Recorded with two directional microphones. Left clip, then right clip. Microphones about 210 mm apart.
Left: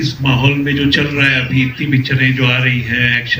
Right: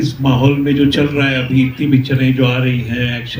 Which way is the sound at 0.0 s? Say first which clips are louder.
Even; 60° right (ahead or behind).